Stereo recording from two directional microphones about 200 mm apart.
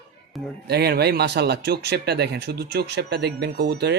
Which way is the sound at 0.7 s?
50° right (ahead or behind).